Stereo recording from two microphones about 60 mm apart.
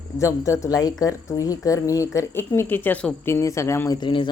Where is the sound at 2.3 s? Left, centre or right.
Left.